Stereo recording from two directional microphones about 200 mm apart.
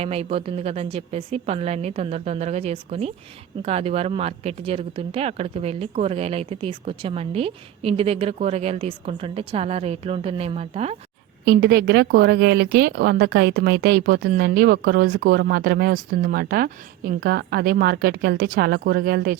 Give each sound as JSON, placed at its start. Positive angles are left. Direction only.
{"t": 0.0, "sound": "a woman's voice", "side_deg": -30}
{"t": 11.4, "sound": "a woman's voice", "side_deg": -55}